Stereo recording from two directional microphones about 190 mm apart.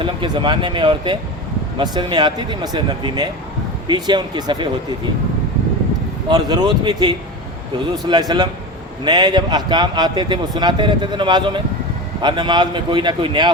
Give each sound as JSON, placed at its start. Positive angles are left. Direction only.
{"t": 0.0, "sound": "a man's voice", "side_deg": -25}
{"t": 6.2, "sound": "a man's voice", "side_deg": -20}